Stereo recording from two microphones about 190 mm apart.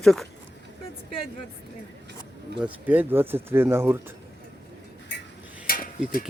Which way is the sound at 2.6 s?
10° right (ahead or behind).